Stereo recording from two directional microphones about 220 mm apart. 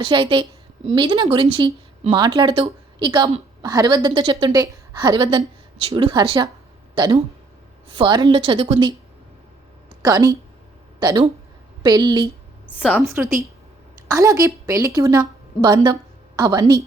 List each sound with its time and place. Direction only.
0.0 s speech: 20° right (ahead or behind)
10.0 s a woman's voice: 15° right (ahead or behind)
12.6 s a woman's voice: 5° left (ahead or behind)
14.1 s a woman's voice: 15° right (ahead or behind)